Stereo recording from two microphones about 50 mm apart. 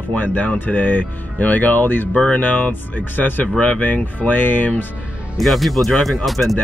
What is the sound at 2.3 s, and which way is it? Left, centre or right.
Speech, left.